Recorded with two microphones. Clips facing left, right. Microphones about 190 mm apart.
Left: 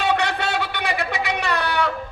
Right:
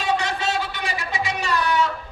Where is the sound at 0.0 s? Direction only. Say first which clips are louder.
Left 2 dB; 65° left (ahead or behind).